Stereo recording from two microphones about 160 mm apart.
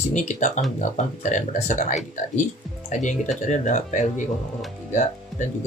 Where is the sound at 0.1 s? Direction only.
50° left (ahead or behind).